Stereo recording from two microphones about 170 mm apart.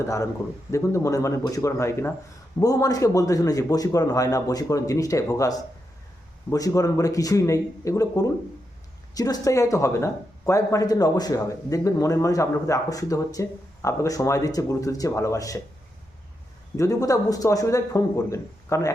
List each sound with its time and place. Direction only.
0.0 s a man's voice: 15° left (ahead or behind)
16.7 s speech: 20° left (ahead or behind)